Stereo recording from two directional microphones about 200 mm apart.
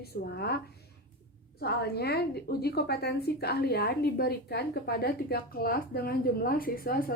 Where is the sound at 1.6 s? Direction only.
55° left (ahead or behind).